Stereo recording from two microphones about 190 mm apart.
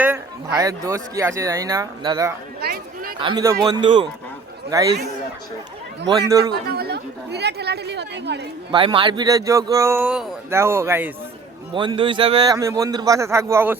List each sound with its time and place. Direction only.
0.0 s speech: 15° right (ahead or behind)
2.6 s a sound: 55° right (ahead or behind)
3.2 s speech: 25° right (ahead or behind)
6.5 s speech: 55° right (ahead or behind)
8.7 s speech: 25° right (ahead or behind)
11.7 s speech: 25° right (ahead or behind)